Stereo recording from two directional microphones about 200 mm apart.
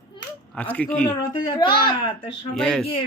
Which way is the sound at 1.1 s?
20° left (ahead or behind).